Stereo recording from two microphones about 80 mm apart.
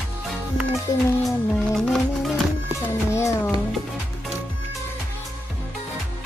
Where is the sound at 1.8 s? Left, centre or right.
Centre.